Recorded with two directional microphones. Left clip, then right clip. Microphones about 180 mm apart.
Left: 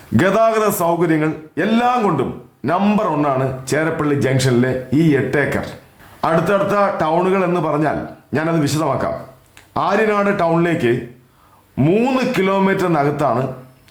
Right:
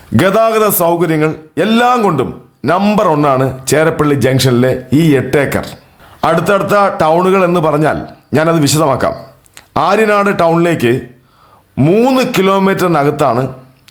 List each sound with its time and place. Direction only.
0.2 s a man's voice: 25° right (ahead or behind)